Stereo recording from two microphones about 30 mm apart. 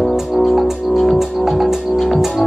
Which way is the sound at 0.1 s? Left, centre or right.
Centre.